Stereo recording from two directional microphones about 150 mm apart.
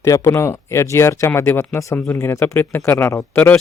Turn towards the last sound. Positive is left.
turn(degrees=15)  # may be behind; listen again after turning